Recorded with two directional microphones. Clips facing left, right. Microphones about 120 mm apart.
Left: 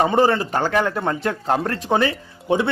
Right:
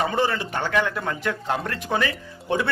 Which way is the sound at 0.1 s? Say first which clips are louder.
Left 6 dB; 35° left (ahead or behind).